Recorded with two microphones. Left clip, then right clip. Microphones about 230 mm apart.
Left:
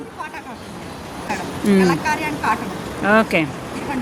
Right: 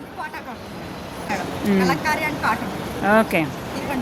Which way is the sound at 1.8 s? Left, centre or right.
Centre.